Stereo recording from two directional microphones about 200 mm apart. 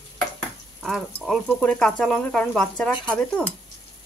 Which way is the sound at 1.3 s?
5° left (ahead or behind).